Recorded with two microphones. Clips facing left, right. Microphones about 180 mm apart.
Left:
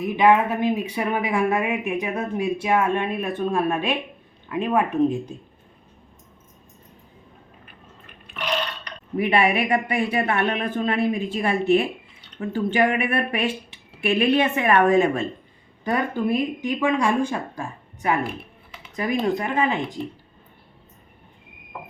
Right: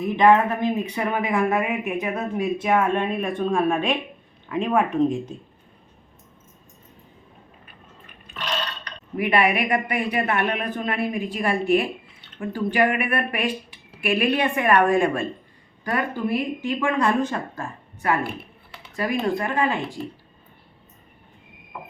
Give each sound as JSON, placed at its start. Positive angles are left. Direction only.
{"t": 0.2, "sound": "speech", "side_deg": 10}
{"t": 9.1, "sound": "speech", "side_deg": 25}
{"t": 19.3, "sound": "speech", "side_deg": 20}